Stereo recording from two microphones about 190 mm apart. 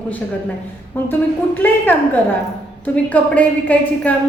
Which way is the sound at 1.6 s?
10° left (ahead or behind).